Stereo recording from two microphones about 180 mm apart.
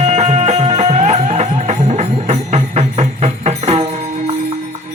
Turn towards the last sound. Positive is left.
turn(degrees=-35)  # may be behind; listen again after turning